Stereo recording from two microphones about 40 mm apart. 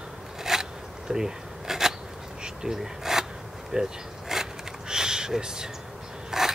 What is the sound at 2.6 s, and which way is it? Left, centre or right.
Speech, centre.